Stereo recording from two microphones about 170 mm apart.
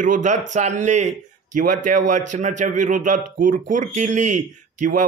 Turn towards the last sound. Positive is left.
turn(degrees=-50)  # may be behind; listen again after turning